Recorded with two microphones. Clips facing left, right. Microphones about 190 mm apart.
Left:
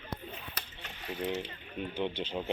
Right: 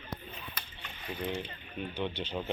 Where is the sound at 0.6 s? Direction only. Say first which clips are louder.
Left 1 dB; 75° left (ahead or behind).